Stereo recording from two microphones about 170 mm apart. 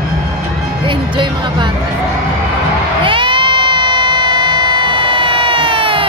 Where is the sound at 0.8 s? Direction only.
30° right (ahead or behind).